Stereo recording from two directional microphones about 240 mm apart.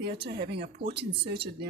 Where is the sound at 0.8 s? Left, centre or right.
Right.